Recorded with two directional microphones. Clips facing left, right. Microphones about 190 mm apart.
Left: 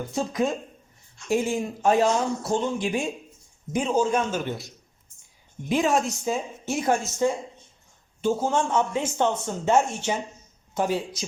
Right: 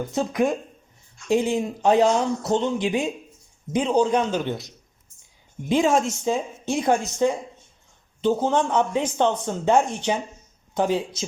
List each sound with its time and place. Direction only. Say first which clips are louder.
0.1 s a man's voice: right 3 dB; 20° right (ahead or behind)
5.6 s a man's voice: right 3 dB; 20° right (ahead or behind)